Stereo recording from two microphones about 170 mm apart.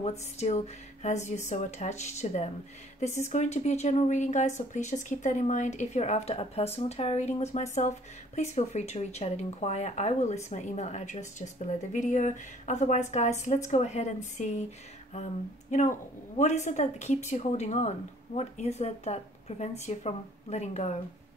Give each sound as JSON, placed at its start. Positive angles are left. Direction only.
{"t": 0.0, "sound": "speech", "side_deg": 40}
{"t": 15.7, "sound": "speech", "side_deg": 45}